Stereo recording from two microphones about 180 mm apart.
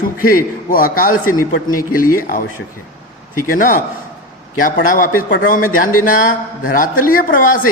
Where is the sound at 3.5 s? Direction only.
50° left (ahead or behind).